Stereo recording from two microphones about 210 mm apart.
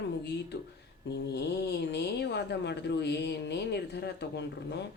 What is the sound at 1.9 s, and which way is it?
A woman's voice, 55° left (ahead or behind).